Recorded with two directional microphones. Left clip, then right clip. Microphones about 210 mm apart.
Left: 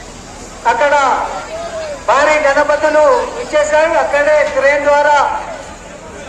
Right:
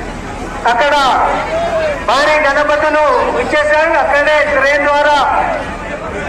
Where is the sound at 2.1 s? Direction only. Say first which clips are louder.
Left 1 dB; 40° left (ahead or behind).